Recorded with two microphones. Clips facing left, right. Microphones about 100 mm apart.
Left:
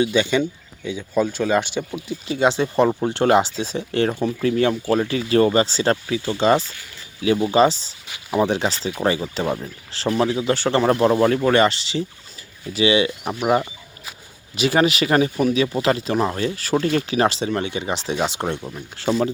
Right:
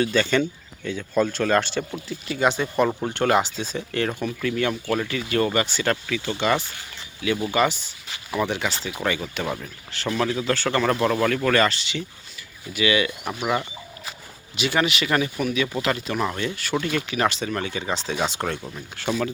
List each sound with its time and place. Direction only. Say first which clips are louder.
0.0 s speech: left 2 dB; 15° left (ahead or behind)
2.2 s speech: left 3 dB; 25° left (ahead or behind)
14.5 s speech: left 5 dB; 35° left (ahead or behind); by 18.9 s 20° left (ahead or behind)
18.9 s speech: left 5 dB; 30° left (ahead or behind)